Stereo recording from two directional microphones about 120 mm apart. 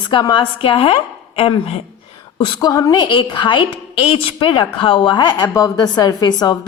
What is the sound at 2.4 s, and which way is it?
Speech, 35° left (ahead or behind).